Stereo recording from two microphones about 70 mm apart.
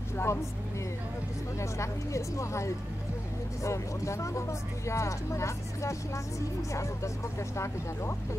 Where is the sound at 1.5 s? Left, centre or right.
Left.